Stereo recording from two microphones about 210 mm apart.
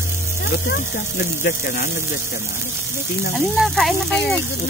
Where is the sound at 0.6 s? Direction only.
50° left (ahead or behind).